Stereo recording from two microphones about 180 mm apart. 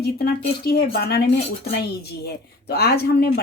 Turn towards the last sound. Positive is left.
turn(degrees=60)  # may be behind; listen again after turning